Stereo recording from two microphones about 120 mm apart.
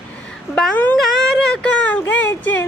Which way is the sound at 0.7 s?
15° left (ahead or behind).